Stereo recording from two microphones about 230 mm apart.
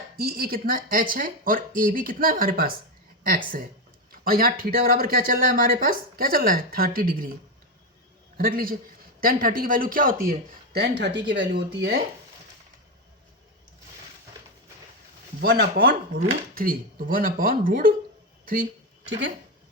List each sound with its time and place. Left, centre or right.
0.2 s speech: right
8.4 s speech: right
15.4 s speech: right